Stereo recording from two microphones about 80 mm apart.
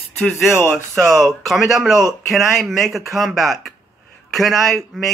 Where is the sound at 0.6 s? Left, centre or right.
Left.